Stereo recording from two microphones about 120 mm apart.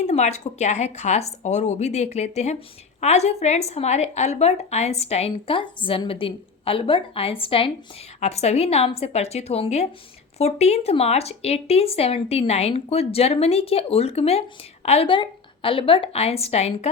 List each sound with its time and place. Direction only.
0.0 s a woman's voice: 70° left (ahead or behind); by 7.7 s 50° left (ahead or behind)
8.2 s speech: 65° left (ahead or behind)
15.1 s speech: 45° left (ahead or behind); by 16.9 s 60° left (ahead or behind)